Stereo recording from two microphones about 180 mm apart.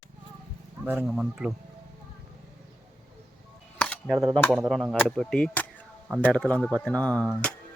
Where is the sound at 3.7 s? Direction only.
5° left (ahead or behind).